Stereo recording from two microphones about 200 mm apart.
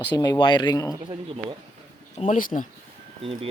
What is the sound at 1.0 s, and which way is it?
Speech, 25° right (ahead or behind).